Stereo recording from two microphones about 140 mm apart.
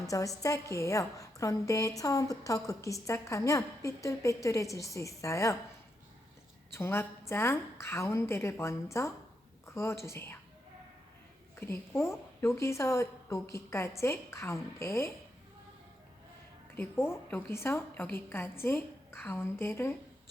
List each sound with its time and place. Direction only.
0.0 s a woman's voice: 25° left (ahead or behind)
6.7 s a woman's voice: 15° left (ahead or behind)
11.5 s a woman's voice: 15° left (ahead or behind)
16.7 s a woman's voice: 15° left (ahead or behind)